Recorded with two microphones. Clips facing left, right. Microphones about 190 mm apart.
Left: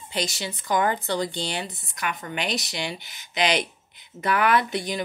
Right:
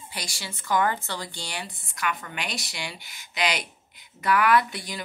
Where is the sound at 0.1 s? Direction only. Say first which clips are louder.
Left 10 dB; 20° left (ahead or behind).